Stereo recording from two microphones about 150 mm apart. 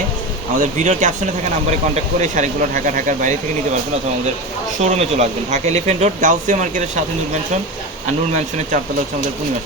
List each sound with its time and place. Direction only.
0.5 s speech: 55° right (ahead or behind)
2.2 s speech: 55° right (ahead or behind)
4.8 s speech: 50° right (ahead or behind)
8.0 s speech: 50° right (ahead or behind)